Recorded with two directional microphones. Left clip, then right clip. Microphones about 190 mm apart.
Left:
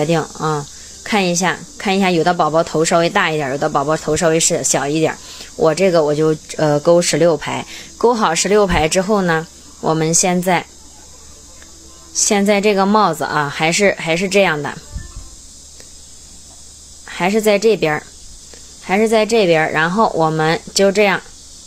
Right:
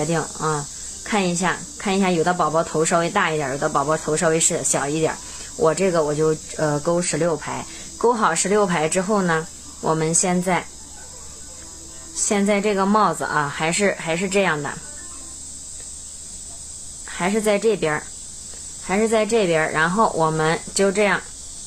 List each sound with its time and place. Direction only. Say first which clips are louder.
0.0 s speech: left 5 dB; 35° left (ahead or behind)
12.3 s speech: left 6 dB; 35° left (ahead or behind)
17.1 s speech: left 6 dB; 35° left (ahead or behind)